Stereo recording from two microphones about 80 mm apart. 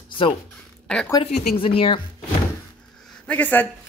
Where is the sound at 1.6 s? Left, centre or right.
Left.